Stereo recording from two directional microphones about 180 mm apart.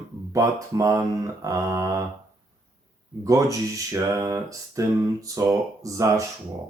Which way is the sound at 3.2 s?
20° right (ahead or behind).